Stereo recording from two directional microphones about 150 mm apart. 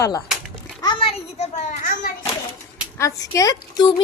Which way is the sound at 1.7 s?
65° left (ahead or behind).